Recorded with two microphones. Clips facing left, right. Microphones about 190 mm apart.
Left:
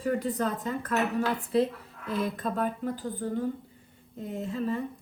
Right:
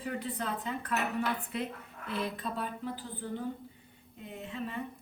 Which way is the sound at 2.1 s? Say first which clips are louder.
Left 5 dB; 45° left (ahead or behind).